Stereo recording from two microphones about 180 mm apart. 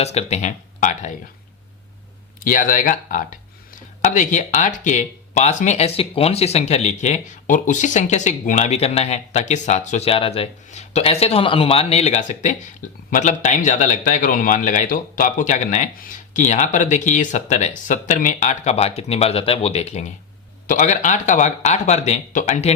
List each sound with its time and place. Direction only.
0.0 s speech: 35° left (ahead or behind)
2.4 s a man's voice: 50° left (ahead or behind)